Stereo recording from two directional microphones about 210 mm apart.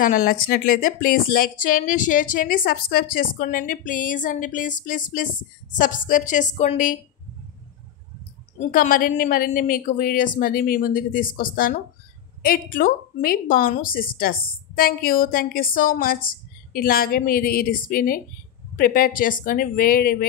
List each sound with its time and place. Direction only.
0.0 s speech: 40° left (ahead or behind)
8.5 s a woman's voice: 40° left (ahead or behind)